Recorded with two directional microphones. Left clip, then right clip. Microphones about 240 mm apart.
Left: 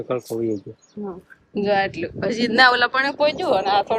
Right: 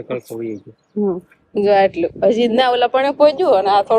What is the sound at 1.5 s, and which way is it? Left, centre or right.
Speech, right.